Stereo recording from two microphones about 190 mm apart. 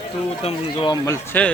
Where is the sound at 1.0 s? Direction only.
10° left (ahead or behind).